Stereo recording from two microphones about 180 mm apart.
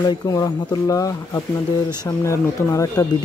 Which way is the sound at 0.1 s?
20° left (ahead or behind).